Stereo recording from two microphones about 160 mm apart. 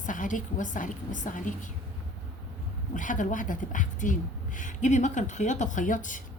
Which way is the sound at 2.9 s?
55° left (ahead or behind).